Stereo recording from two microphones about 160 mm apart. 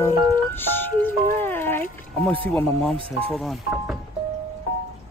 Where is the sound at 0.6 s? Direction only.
15° left (ahead or behind).